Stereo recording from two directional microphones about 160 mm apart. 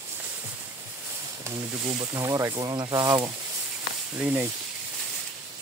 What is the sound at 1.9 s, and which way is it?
Speech, 25° right (ahead or behind).